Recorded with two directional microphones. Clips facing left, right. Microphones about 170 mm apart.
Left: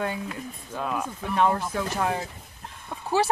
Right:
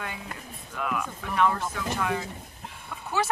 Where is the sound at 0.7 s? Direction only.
30° left (ahead or behind).